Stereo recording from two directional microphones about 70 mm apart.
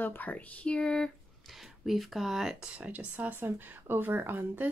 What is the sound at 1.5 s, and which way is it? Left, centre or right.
Speech, centre.